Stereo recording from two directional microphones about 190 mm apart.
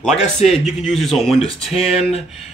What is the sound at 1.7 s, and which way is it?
Speech, 30° left (ahead or behind).